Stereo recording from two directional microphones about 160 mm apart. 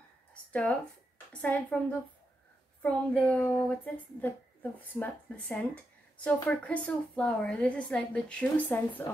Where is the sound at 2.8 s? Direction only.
10° left (ahead or behind).